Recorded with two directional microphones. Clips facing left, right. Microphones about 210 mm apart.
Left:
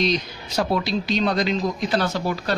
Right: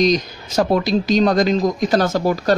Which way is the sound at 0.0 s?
45° right (ahead or behind).